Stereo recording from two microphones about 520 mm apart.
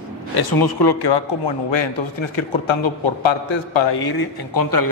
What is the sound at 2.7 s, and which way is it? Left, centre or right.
A man's voice, left.